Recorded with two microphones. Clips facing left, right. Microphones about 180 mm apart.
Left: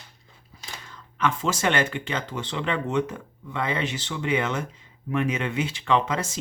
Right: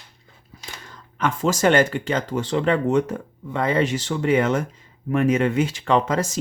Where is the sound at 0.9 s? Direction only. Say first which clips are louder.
Right 1 dB; 45° right (ahead or behind).